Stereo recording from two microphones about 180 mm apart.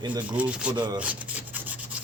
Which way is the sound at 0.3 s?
5° right (ahead or behind).